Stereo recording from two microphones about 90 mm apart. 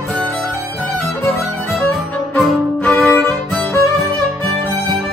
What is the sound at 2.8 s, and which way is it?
Violin, 15° left (ahead or behind).